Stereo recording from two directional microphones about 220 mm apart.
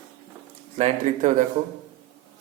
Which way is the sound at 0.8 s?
35° right (ahead or behind).